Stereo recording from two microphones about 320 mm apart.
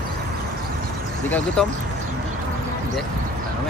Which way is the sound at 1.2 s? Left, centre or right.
Centre.